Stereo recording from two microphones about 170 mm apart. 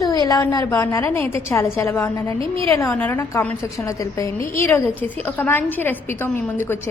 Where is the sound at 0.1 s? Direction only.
20° left (ahead or behind).